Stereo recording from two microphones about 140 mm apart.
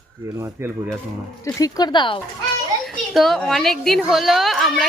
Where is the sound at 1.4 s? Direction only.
25° left (ahead or behind).